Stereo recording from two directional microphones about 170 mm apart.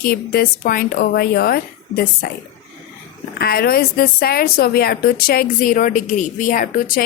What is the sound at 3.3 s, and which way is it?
A woman's voice, 65° left (ahead or behind).